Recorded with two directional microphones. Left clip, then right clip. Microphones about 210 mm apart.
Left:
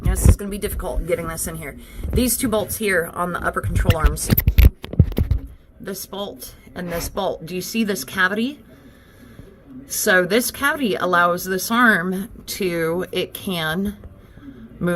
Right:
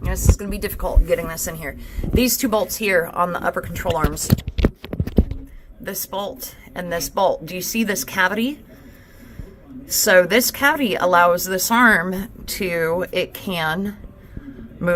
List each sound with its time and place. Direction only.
0.3 s a woman's voice: 30° left (ahead or behind)
4.4 s a sound: 25° left (ahead or behind)
5.8 s a woman's voice: 40° left (ahead or behind)
9.9 s a woman's voice: 35° left (ahead or behind)